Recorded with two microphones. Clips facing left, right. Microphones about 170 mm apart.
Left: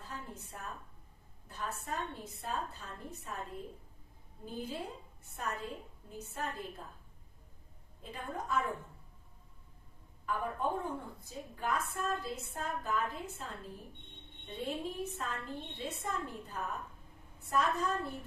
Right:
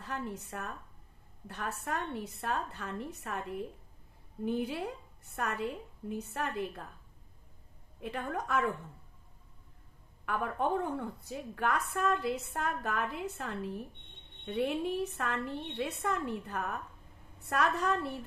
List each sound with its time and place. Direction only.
0.0 s a woman's voice: 75° right (ahead or behind)
8.0 s a woman's voice: 70° right (ahead or behind)
10.2 s a woman's voice: 70° right (ahead or behind)